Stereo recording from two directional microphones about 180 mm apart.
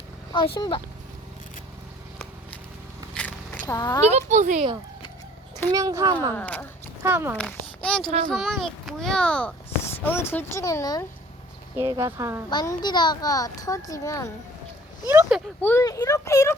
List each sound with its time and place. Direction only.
3.2 s a sound: 5° left (ahead or behind)
3.7 s speech: 20° left (ahead or behind)
4.1 s speech: 40° right (ahead or behind)
5.7 s speech: 20° right (ahead or behind)
6.3 s a child's voice: 10° left (ahead or behind)
7.0 s speech: 15° right (ahead or behind)
7.3 s a child's voice: 5° left (ahead or behind)
11.8 s speech: 15° right (ahead or behind)
12.5 s speech: 25° left (ahead or behind)
15.0 s speech: 10° right (ahead or behind)
15.6 s a child's voice: 15° left (ahead or behind)